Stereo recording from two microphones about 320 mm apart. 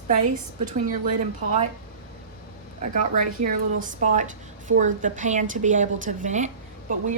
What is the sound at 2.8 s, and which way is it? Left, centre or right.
A woman's voice, right.